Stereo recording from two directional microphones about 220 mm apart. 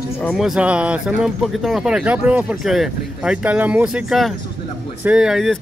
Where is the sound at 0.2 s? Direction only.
Centre (ahead or behind).